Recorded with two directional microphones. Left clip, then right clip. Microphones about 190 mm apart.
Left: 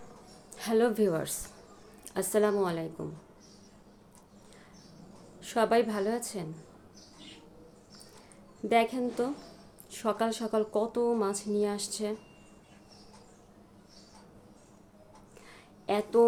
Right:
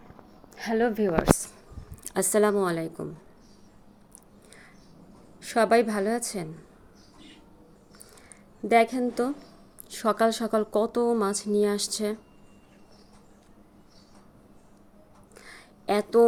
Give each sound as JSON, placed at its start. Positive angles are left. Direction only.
{"t": 0.5, "sound": "a woman's voice", "side_deg": 0}
{"t": 2.0, "sound": "speech", "side_deg": -35}
{"t": 5.4, "sound": "speech", "side_deg": -30}
{"t": 8.7, "sound": "speech", "side_deg": -30}
{"t": 15.4, "sound": "a sound", "side_deg": -30}